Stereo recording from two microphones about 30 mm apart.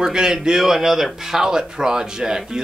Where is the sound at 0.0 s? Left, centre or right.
Right.